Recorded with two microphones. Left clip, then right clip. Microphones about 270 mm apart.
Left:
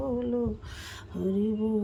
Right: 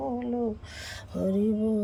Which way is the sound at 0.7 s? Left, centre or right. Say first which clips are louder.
Right 3 dB; centre.